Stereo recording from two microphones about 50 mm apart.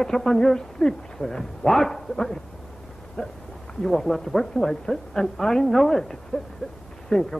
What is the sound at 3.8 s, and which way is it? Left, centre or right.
Speech, centre.